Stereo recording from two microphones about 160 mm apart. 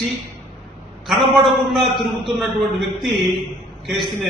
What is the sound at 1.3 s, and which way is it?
A man's voice, centre (ahead or behind).